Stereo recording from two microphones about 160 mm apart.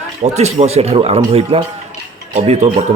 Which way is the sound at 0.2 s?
45° right (ahead or behind).